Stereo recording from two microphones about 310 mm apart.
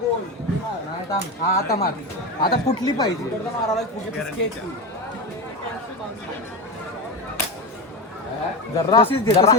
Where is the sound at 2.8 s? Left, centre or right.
Centre.